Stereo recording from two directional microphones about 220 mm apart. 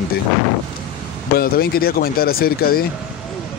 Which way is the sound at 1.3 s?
45° left (ahead or behind).